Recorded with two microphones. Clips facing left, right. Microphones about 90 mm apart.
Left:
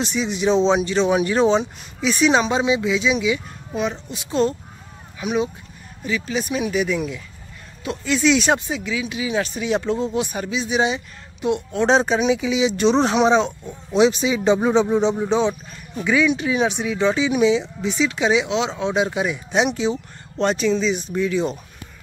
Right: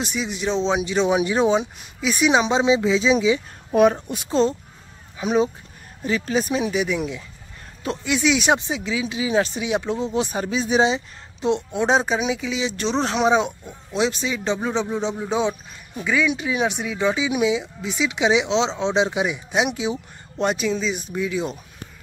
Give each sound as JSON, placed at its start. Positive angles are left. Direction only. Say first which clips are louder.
{"t": 0.0, "sound": "speech", "louder": "left 4 dB", "side_deg": -5}
{"t": 3.7, "sound": "speech", "louder": "right 8 dB", "side_deg": -50}
{"t": 4.3, "sound": "speech", "louder": "even", "side_deg": -25}
{"t": 9.6, "sound": "speech", "louder": "left 2 dB", "side_deg": -15}
{"t": 10.1, "sound": "speech", "louder": "right 1 dB", "side_deg": -30}
{"t": 11.7, "sound": "speech", "louder": "left 5 dB", "side_deg": -10}
{"t": 13.3, "sound": "speech", "louder": "left 2 dB", "side_deg": -10}
{"t": 13.9, "sound": "speech", "louder": "left 6 dB", "side_deg": 5}
{"t": 16.0, "sound": "speech", "louder": "left 3 dB", "side_deg": 0}